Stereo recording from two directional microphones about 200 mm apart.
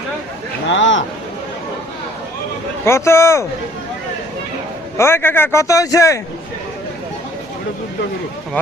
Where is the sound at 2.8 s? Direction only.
15° left (ahead or behind).